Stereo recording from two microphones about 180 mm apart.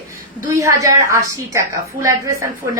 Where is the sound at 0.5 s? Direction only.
20° right (ahead or behind).